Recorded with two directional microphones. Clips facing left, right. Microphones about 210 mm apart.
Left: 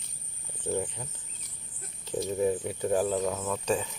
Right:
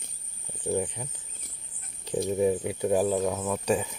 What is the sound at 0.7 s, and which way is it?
Speech, 15° right (ahead or behind).